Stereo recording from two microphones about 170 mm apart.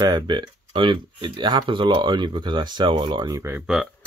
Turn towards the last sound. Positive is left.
turn(degrees=0)  # may be behind; listen again after turning